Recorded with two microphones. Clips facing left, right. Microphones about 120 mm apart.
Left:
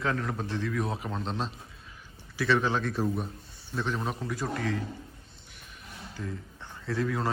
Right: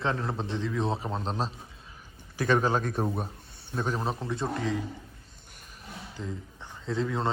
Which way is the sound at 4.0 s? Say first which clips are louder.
Right 2 dB; 30° right (ahead or behind).